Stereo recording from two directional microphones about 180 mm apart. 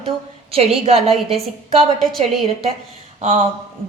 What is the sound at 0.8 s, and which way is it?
Speech, 30° right (ahead or behind).